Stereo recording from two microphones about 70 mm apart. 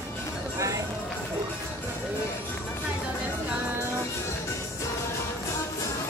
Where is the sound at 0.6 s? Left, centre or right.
Right.